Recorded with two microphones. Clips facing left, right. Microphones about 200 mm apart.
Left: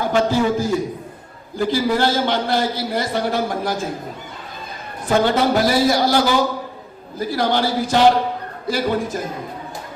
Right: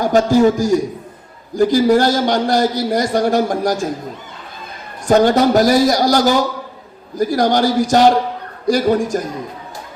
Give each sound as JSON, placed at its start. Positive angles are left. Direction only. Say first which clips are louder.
{"t": 0.0, "sound": "a man's voice", "louder": "right 6 dB", "side_deg": -40}
{"t": 5.0, "sound": "a man's voice", "louder": "right 5 dB", "side_deg": -45}